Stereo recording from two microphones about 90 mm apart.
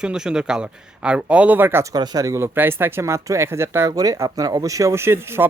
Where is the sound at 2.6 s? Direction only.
25° right (ahead or behind).